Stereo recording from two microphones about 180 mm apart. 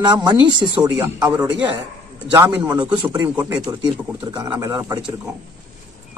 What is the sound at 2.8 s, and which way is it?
Speech, 25° right (ahead or behind).